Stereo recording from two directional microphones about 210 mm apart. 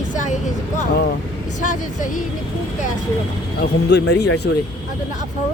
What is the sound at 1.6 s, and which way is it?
Speech, 35° left (ahead or behind).